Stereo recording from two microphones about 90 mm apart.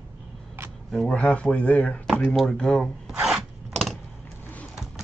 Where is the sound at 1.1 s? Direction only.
15° left (ahead or behind).